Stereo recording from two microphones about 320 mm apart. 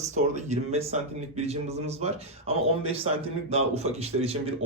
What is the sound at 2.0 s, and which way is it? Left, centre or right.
A man's voice, centre.